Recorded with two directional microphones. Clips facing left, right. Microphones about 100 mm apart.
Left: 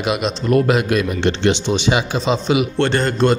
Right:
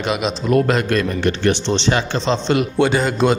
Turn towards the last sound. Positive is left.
turn(degrees=-5)  # may be behind; listen again after turning